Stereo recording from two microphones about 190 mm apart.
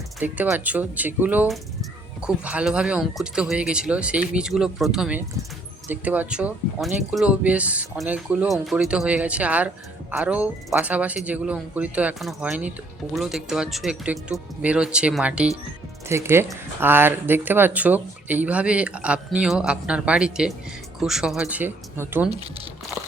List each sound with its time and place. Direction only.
0.2 s speech: 10° right (ahead or behind)
22.3 s speech: 30° right (ahead or behind)